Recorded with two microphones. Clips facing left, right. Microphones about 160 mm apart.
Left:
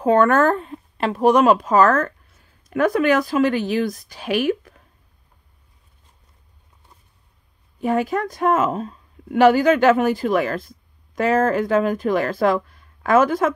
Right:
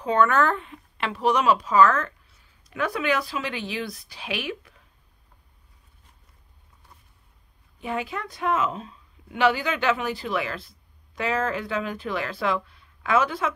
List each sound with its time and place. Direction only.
0.0 s speech: 50° left (ahead or behind)
7.8 s a woman's voice: 45° left (ahead or behind)